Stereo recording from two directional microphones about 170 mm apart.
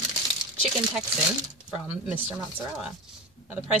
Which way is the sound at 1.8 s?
10° right (ahead or behind).